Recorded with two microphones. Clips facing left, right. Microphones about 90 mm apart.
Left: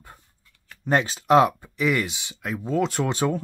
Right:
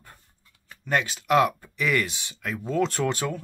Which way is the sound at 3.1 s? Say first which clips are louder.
Left 6 dB; 30° left (ahead or behind).